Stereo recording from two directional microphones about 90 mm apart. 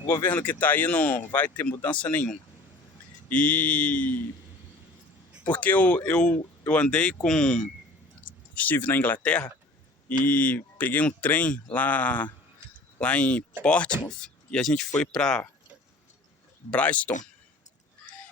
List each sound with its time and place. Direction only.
0.0 s speech: 25° left (ahead or behind)
5.5 s speech: 20° left (ahead or behind)
16.7 s speech: 15° left (ahead or behind)